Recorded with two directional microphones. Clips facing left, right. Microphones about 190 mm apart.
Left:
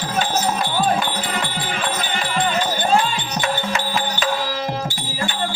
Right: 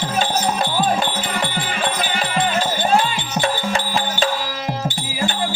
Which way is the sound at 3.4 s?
30° right (ahead or behind).